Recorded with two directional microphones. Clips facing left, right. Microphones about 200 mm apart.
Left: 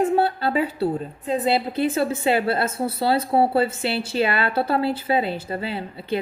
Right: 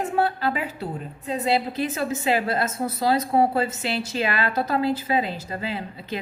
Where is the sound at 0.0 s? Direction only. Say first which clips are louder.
Left 3 dB; 30° left (ahead or behind).